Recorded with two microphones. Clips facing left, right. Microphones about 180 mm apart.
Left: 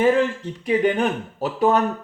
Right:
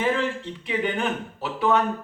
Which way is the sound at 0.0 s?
45° left (ahead or behind).